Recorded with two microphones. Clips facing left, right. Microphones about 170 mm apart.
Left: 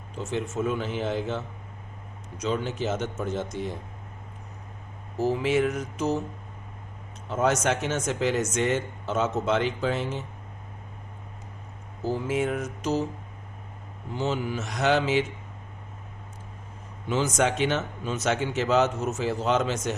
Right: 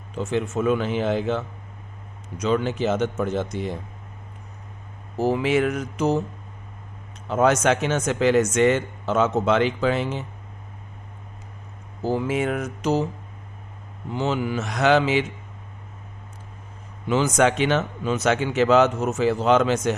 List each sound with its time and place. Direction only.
0.2 s speech: 65° right (ahead or behind)
5.2 s speech: 80° right
7.3 s speech: 80° right
12.0 s speech: 85° right; by 13.1 s 70° right (ahead or behind)
14.2 s speech: 90° right
17.1 s speech: 90° right